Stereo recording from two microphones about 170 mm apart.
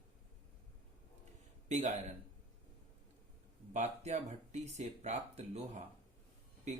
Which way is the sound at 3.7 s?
40° right (ahead or behind).